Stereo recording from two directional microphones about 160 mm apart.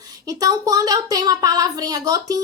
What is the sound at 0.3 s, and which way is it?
Speech, 20° right (ahead or behind).